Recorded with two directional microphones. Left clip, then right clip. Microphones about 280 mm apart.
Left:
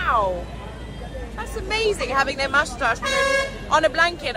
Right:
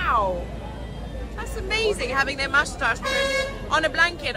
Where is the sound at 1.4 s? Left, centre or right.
Centre.